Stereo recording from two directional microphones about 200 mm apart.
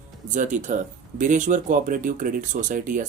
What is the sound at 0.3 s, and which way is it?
Speech, 40° right (ahead or behind).